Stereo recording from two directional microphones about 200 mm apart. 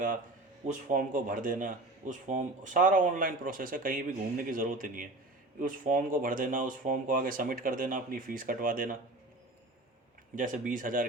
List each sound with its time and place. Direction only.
0.6 s a man's voice: 40° right (ahead or behind)
10.3 s a man's voice: 40° right (ahead or behind)